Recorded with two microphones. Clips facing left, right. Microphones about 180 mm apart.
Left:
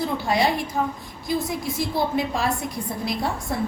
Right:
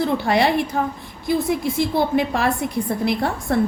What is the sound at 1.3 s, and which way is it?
A woman's voice, 60° right (ahead or behind).